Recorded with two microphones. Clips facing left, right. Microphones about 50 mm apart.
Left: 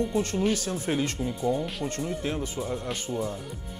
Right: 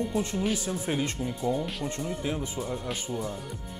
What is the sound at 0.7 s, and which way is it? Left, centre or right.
Speech, centre.